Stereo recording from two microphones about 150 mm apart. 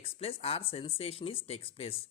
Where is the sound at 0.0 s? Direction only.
40° left (ahead or behind).